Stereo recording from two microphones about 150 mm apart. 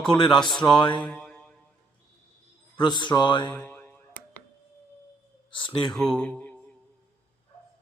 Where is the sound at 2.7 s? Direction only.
30° left (ahead or behind).